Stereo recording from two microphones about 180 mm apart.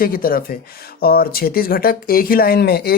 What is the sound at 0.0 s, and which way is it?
Speech, 55° left (ahead or behind).